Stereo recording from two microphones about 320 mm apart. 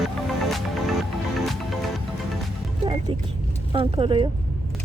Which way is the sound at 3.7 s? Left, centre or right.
Centre.